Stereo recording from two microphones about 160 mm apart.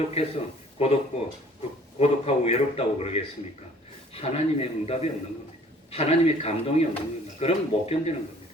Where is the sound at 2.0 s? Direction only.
40° left (ahead or behind).